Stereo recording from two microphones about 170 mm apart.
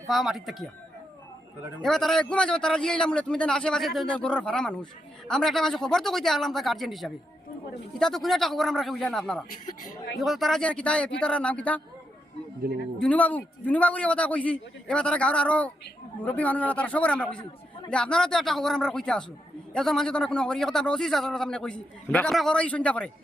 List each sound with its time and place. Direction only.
0.1 s a man's voice: centre (ahead or behind)
1.8 s a man's voice: centre (ahead or behind)
12.6 s a man's voice: 60° right (ahead or behind)
13.0 s a man's voice: 10° left (ahead or behind)